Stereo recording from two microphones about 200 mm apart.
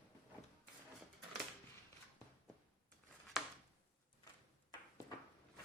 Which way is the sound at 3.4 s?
Centre (ahead or behind).